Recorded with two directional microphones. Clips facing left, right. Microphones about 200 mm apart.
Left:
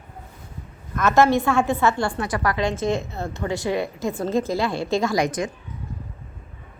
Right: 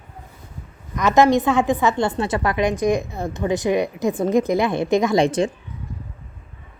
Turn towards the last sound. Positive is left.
turn(degrees=-30)  # may be behind; listen again after turning